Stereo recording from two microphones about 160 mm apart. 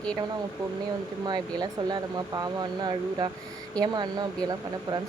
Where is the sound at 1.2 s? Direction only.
25° right (ahead or behind).